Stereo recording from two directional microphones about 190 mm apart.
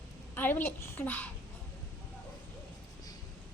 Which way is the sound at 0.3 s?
10° left (ahead or behind).